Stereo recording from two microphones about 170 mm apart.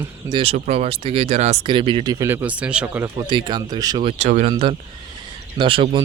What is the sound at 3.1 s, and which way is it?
Speech, 25° right (ahead or behind).